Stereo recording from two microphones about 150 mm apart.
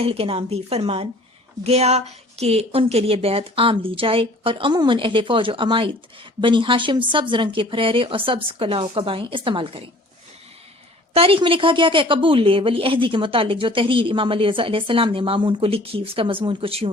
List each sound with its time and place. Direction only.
0.0 s a woman's voice: 40° right (ahead or behind)
11.1 s a woman's voice: 40° right (ahead or behind)